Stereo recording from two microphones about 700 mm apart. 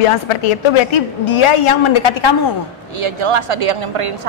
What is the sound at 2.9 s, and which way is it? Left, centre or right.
A woman's voice, right.